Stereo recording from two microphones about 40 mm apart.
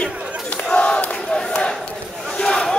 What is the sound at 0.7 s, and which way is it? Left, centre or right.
Battle cry, left.